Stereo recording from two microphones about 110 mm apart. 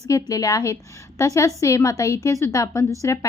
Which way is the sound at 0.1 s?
30° left (ahead or behind).